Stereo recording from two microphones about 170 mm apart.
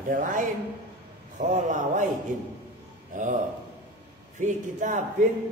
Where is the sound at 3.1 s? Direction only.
50° right (ahead or behind).